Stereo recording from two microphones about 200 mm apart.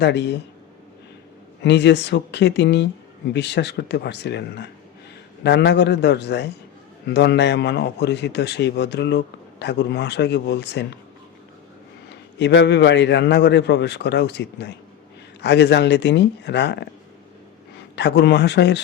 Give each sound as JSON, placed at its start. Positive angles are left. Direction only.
{"t": 0.0, "sound": "a man's voice", "side_deg": 60}
{"t": 1.6, "sound": "a man's voice", "side_deg": 60}
{"t": 12.0, "sound": "a man's voice", "side_deg": 60}
{"t": 17.9, "sound": "a man's voice", "side_deg": 60}